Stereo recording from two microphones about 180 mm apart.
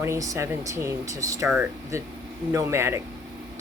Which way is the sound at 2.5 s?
15° right (ahead or behind).